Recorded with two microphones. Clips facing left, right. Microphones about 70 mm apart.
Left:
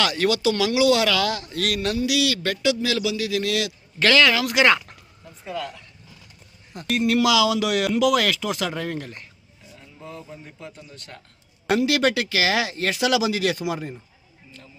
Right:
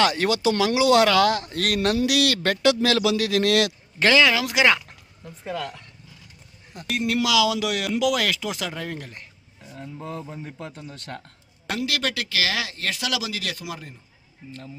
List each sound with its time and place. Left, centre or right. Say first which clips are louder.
0.0 s a man's voice: even; right
4.0 s speech: even; centre
6.7 s speech: left 4 dB; centre
9.7 s speech: right 5 dB; right
10.2 s speech: right 4 dB; right
10.6 s a man's voice: right 3 dB; right
11.7 s speech: left 7 dB; centre